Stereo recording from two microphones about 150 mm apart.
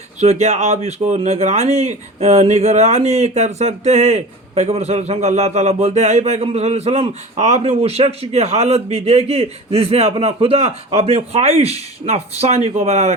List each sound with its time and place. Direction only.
0.2 s speech: 45° right (ahead or behind)